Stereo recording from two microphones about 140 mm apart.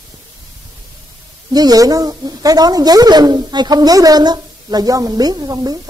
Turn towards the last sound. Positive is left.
turn(degrees=-25)  # may be behind; listen again after turning